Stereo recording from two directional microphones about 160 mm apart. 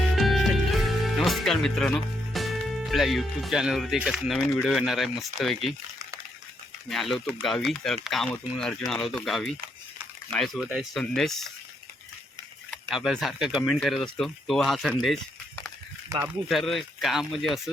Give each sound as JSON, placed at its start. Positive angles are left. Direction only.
{"t": 0.2, "sound": "speech", "side_deg": 0}
{"t": 6.8, "sound": "speech", "side_deg": 0}
{"t": 12.9, "sound": "speech", "side_deg": 0}
{"t": 16.0, "sound": "speech", "side_deg": -20}
{"t": 16.5, "sound": "speech", "side_deg": 0}